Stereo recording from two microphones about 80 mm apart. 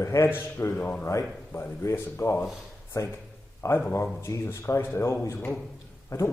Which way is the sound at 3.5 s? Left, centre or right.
Left.